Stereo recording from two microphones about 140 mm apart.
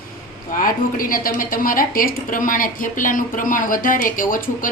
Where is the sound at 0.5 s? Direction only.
80° left.